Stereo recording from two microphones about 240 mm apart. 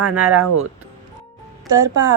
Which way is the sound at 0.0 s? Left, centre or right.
Right.